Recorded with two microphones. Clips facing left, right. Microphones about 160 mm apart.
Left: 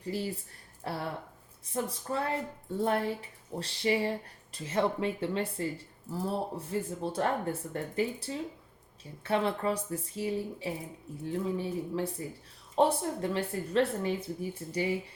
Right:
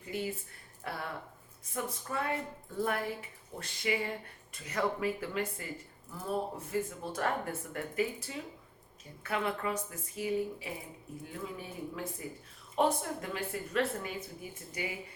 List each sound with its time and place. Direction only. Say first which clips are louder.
0.0 s speech: left 2 dB; 35° left (ahead or behind)